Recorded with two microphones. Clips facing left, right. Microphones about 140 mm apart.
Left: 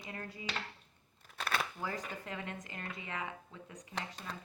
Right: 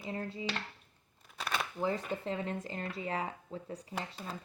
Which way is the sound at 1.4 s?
Centre (ahead or behind).